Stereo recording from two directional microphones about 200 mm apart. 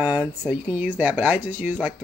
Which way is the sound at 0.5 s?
10° right (ahead or behind).